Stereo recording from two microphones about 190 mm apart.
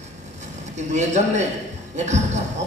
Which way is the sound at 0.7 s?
40° right (ahead or behind).